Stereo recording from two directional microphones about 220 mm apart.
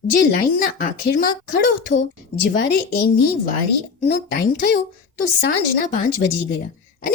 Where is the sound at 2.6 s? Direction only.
45° left (ahead or behind).